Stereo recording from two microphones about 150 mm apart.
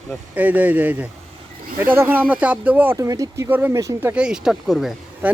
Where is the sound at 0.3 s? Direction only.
10° right (ahead or behind).